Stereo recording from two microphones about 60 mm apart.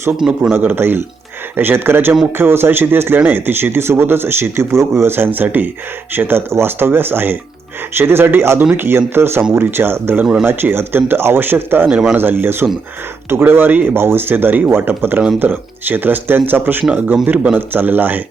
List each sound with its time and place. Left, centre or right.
0.5 s speech: right
11.9 s speech: centre
12.1 s speech: right